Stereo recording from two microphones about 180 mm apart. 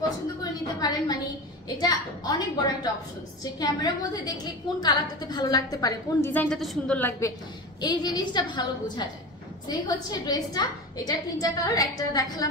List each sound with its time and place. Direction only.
0.4 s a sound: 20° left (ahead or behind)
1.8 s a woman's voice: 20° left (ahead or behind)
6.3 s a woman's voice: 5° left (ahead or behind); by 8.6 s 25° left (ahead or behind)
9.7 s a woman's voice: 20° left (ahead or behind)